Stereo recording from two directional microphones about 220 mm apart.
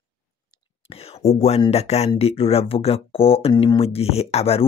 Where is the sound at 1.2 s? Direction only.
30° left (ahead or behind).